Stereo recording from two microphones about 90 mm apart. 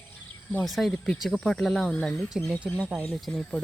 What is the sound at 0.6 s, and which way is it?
Speech, centre (ahead or behind).